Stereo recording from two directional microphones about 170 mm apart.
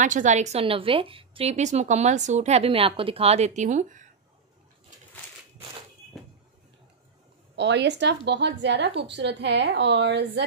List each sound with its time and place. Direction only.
0.0 s a woman's voice: 45° right (ahead or behind)
7.5 s a woman's voice: 90° right